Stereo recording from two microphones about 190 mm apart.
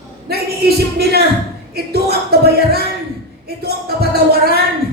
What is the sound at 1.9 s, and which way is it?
Music, 55° right (ahead or behind).